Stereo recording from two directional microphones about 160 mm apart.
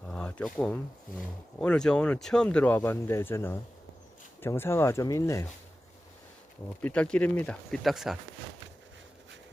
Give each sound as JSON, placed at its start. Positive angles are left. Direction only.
{"t": 0.1, "sound": "a sound", "side_deg": 5}
{"t": 1.5, "sound": "speech", "side_deg": 5}
{"t": 6.8, "sound": "speech", "side_deg": 5}